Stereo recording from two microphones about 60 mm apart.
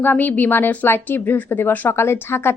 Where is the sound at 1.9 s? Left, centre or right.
Left.